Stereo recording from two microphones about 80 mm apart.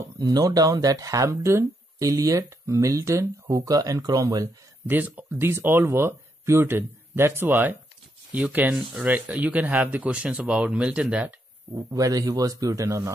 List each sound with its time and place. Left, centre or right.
0.2 s speech: right
1.3 s speech: right
4.8 s speech: right
5.5 s speech: right; by 11.3 s centre
11.7 s speech: right